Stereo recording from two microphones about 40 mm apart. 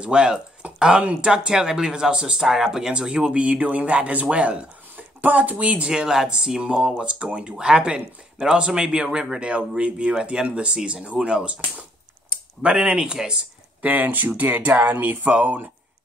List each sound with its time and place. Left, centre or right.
0.0 s speech: right
1.5 s speech: centre
3.3 s speech: right
4.9 s speech: right
5.9 s speech: centre
12.6 s speech: right
13.7 s speech: right
15.2 s speech: right